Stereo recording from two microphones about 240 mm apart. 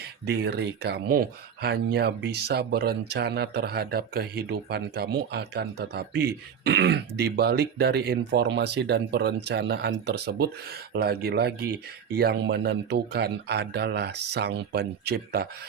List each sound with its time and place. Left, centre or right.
0.0 s speech: right